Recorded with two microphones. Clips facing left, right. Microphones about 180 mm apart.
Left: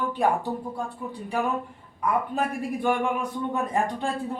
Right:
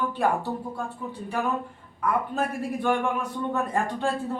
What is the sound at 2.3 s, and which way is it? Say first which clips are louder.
Speech: even; 15° left (ahead or behind).